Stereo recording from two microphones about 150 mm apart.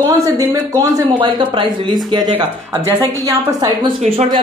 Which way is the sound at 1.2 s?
35° right (ahead or behind).